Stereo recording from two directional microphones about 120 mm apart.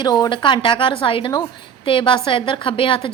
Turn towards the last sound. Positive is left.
turn(degrees=45)  # may be behind; listen again after turning